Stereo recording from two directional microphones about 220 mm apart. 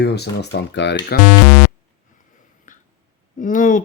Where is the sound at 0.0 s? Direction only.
50° left (ahead or behind).